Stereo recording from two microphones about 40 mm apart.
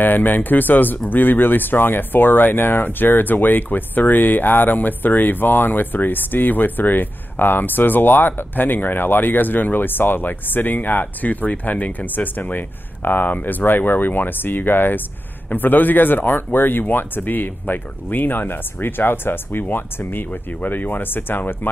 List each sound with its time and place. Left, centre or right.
0.0 s speech: left